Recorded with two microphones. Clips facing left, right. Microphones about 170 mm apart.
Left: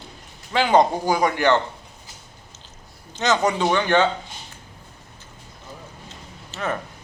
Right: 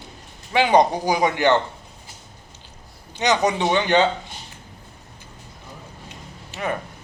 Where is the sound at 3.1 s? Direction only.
15° right (ahead or behind).